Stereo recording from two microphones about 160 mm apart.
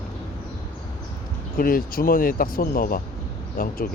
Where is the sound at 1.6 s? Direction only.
65° left (ahead or behind).